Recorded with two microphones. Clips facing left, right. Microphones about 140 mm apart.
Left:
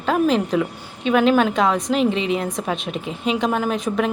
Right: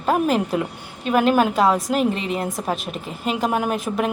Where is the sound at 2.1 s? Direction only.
45° right (ahead or behind).